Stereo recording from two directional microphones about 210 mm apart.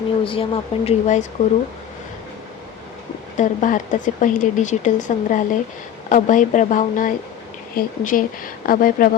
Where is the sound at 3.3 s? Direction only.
35° left (ahead or behind).